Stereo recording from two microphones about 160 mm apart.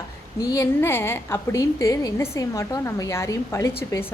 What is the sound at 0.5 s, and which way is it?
A woman's voice, 15° left (ahead or behind).